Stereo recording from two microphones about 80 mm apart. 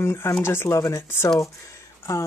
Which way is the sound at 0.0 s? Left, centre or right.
Left.